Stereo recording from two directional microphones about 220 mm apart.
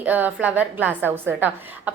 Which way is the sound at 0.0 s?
5° right (ahead or behind).